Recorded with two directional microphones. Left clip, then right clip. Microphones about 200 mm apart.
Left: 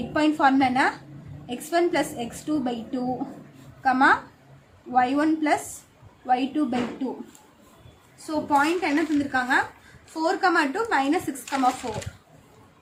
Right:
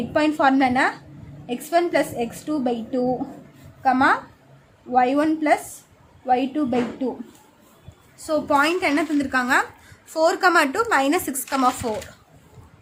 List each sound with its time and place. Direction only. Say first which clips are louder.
0.1 s a woman's voice: right 2 dB; 30° right (ahead or behind)
8.3 s a woman's voice: right 3 dB; 50° right (ahead or behind)